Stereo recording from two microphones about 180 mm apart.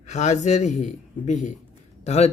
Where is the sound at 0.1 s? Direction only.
40° left (ahead or behind).